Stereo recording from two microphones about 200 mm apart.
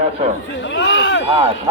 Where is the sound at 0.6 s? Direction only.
65° left (ahead or behind).